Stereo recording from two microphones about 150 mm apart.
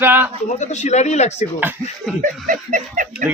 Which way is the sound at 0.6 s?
50° left (ahead or behind).